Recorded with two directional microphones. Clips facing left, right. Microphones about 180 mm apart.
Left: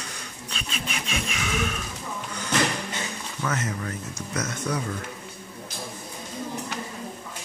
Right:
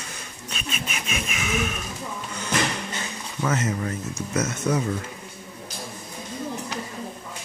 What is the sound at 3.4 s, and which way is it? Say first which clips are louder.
Speech: right 4 dB; 25° right (ahead or behind).